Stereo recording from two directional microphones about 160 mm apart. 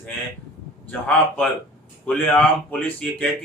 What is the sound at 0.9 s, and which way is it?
Speech, 10° left (ahead or behind).